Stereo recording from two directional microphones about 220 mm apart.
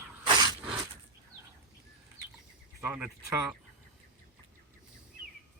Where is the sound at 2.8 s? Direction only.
10° right (ahead or behind).